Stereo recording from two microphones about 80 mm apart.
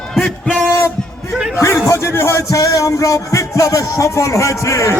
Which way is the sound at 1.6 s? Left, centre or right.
Left.